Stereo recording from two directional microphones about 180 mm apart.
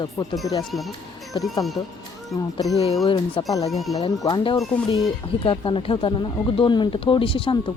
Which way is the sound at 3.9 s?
20° left (ahead or behind).